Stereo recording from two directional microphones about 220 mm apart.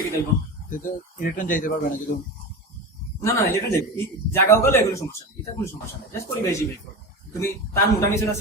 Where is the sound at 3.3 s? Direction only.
15° left (ahead or behind).